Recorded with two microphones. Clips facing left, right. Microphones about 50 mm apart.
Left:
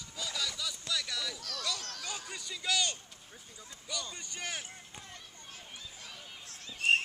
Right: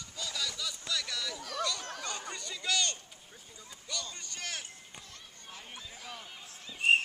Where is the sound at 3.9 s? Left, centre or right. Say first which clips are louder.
Even; centre.